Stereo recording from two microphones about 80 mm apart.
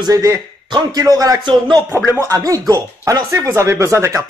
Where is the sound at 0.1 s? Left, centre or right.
Right.